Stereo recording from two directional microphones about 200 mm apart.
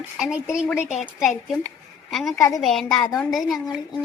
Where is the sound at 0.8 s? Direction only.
35° left (ahead or behind).